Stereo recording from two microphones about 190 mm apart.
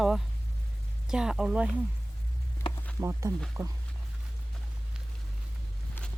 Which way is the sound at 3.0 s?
15° right (ahead or behind).